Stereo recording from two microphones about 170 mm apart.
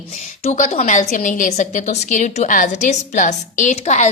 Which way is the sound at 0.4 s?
40° left (ahead or behind).